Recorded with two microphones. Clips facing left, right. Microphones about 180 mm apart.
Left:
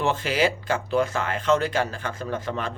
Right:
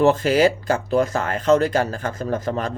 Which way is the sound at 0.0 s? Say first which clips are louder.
Right 7 dB; 40° right (ahead or behind).